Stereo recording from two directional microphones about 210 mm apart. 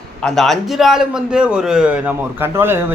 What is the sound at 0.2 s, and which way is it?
A man's voice, 5° left (ahead or behind).